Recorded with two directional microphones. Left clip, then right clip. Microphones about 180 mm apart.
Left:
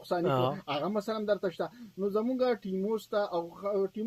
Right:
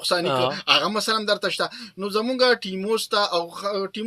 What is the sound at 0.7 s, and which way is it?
Speech, 35° right (ahead or behind).